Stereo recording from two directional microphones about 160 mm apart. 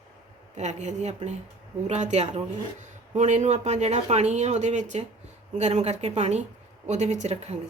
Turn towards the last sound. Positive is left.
turn(degrees=-45)  # may be behind; listen again after turning